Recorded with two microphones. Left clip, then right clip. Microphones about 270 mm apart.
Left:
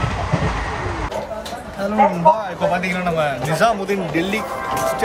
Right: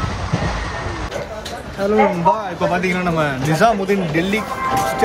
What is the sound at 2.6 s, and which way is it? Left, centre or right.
A man's voice, centre.